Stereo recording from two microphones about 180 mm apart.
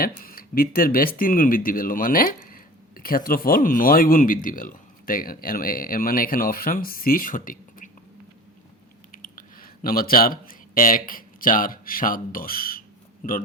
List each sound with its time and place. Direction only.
0.2 s speech: 55° left (ahead or behind)
9.1 s speech: 50° left (ahead or behind)